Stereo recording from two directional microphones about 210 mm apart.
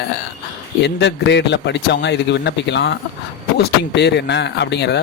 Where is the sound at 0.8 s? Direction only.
55° left (ahead or behind).